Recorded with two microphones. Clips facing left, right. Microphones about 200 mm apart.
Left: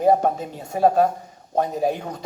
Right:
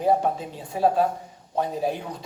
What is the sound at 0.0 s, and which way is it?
Speech, 45° left (ahead or behind).